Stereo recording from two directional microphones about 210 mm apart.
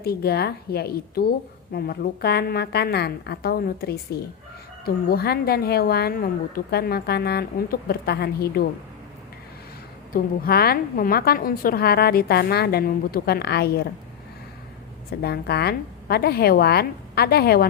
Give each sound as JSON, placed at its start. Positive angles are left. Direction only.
{"t": 0.0, "sound": "a woman's voice", "side_deg": 50}
{"t": 10.1, "sound": "a woman's voice", "side_deg": 45}
{"t": 15.1, "sound": "a woman's voice", "side_deg": 50}